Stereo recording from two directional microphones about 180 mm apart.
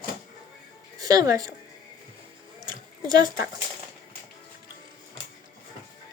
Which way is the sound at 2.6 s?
25° right (ahead or behind).